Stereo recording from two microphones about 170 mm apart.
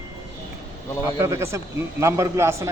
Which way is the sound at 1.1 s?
15° right (ahead or behind).